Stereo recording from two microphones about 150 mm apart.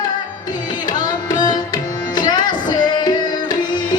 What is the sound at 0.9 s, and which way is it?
Music, 30° left (ahead or behind).